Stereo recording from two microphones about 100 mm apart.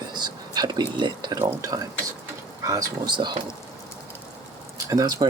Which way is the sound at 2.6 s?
40° right (ahead or behind).